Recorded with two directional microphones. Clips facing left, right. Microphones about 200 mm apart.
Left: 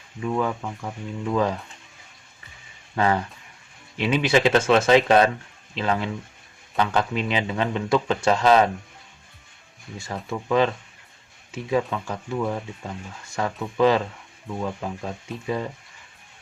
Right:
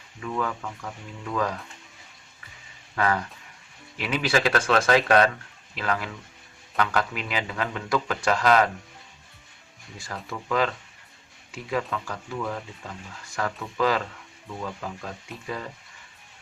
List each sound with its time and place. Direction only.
0.2 s speech: 25° left (ahead or behind)
2.9 s speech: 25° left (ahead or behind)
10.0 s speech: 25° left (ahead or behind)